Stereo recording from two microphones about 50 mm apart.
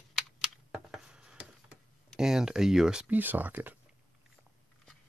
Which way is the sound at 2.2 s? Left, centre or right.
Centre.